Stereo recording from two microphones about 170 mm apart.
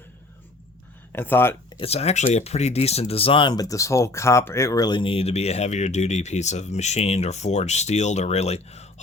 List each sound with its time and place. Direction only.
1.1 s speech: 10° left (ahead or behind)
1.7 s speech: 35° left (ahead or behind)